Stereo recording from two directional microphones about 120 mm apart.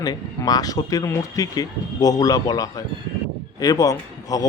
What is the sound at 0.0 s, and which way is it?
A man's voice, 35° left (ahead or behind).